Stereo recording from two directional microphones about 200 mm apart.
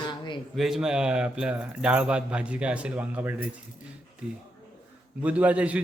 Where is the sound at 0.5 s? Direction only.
Centre (ahead or behind).